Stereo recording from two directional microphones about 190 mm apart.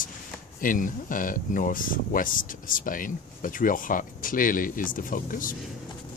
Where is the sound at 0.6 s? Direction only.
45° left (ahead or behind).